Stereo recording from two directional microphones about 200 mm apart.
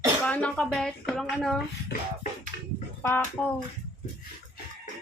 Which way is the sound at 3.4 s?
5° left (ahead or behind).